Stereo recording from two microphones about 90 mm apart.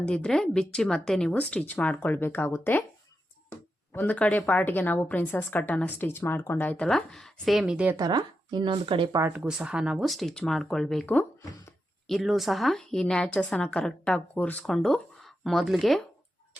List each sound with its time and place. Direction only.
0.0 s speech: 10° left (ahead or behind)
3.9 s a woman's voice: 20° left (ahead or behind)
6.7 s speech: 10° left (ahead or behind)
7.9 s speech: 50° right (ahead or behind); by 9.0 s 65° right (ahead or behind)
9.3 s speech: 10° right (ahead or behind); by 14.6 s 15° left (ahead or behind)
14.6 s speech: 5° left (ahead or behind)